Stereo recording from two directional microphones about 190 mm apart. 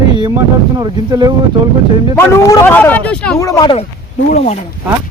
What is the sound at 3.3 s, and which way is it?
Speech, 15° left (ahead or behind).